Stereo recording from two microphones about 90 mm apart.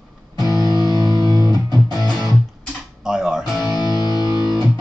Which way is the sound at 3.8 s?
45° left (ahead or behind).